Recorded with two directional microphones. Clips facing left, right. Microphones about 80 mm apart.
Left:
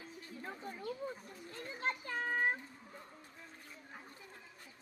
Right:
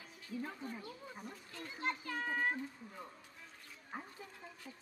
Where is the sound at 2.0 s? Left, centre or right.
Left.